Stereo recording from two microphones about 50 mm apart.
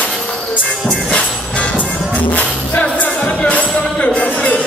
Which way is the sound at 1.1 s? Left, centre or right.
Left.